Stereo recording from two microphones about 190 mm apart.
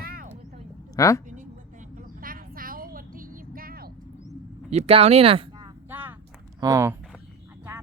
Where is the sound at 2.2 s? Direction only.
50° right (ahead or behind).